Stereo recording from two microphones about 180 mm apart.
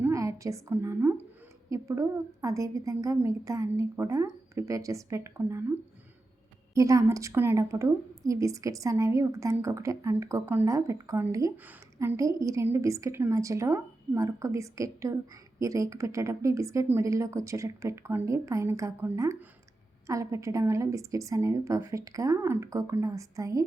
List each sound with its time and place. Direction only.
0.0 s a woman's voice: 15° right (ahead or behind)
6.7 s a woman's voice: 20° right (ahead or behind)